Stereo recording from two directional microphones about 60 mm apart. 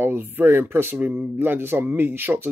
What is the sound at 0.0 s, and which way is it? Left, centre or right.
Speech, right.